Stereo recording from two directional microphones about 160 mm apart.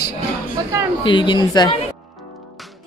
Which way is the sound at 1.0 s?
30° left (ahead or behind).